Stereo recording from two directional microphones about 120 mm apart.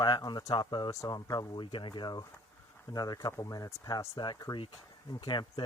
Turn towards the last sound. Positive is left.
turn(degrees=40)  # may be behind; listen again after turning